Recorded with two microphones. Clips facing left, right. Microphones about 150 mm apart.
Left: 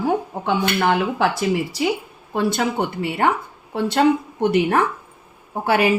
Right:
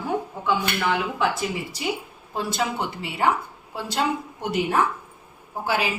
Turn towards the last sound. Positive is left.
turn(degrees=55)  # may be behind; listen again after turning